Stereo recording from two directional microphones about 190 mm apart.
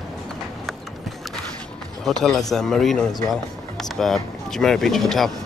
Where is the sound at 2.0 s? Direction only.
Centre (ahead or behind).